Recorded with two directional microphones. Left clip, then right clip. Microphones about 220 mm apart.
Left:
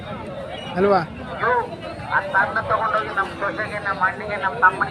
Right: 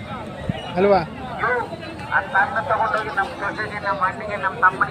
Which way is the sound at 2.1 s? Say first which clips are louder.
Even; 40° left (ahead or behind).